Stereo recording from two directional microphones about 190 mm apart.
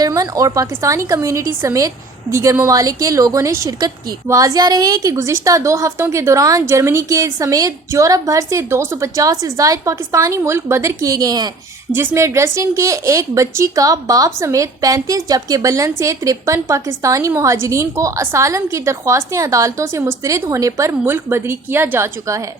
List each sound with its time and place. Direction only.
0.0 s speech: 20° right (ahead or behind)